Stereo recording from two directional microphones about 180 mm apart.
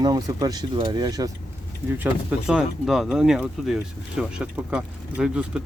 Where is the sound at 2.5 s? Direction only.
Centre (ahead or behind).